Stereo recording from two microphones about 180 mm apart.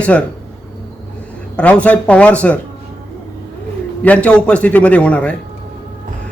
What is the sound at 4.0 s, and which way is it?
A man's voice, 5° left (ahead or behind).